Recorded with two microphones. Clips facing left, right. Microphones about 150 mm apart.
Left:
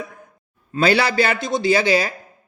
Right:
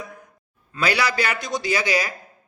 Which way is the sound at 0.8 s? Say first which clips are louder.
Left 5 dB; 30° left (ahead or behind).